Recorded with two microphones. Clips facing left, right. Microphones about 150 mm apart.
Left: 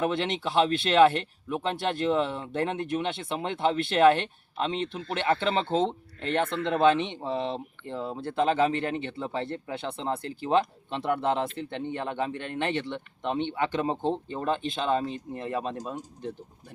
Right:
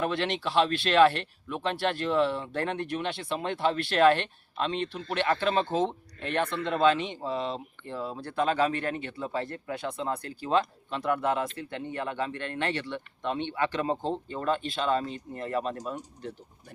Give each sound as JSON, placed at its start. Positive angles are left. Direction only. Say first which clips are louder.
{"t": 0.0, "sound": "speech", "louder": "left 1 dB", "side_deg": 20}